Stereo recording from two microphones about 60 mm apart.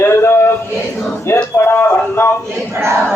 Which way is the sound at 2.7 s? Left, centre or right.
Right.